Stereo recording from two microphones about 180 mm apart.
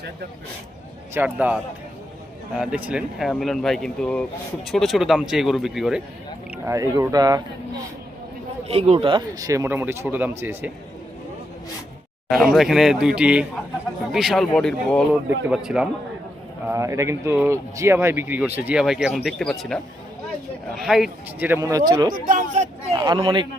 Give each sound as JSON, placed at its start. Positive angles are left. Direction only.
{"t": 1.1, "sound": "speech", "side_deg": -10}
{"t": 2.6, "sound": "speech", "side_deg": -5}
{"t": 6.7, "sound": "speech", "side_deg": -15}
{"t": 8.6, "sound": "speech", "side_deg": -35}
{"t": 12.5, "sound": "speech", "side_deg": 0}
{"t": 16.6, "sound": "speech", "side_deg": -15}
{"t": 22.1, "sound": "speech", "side_deg": -50}
{"t": 22.9, "sound": "speech", "side_deg": -25}